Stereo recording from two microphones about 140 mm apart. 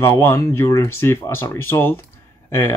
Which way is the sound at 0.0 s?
20° left (ahead or behind).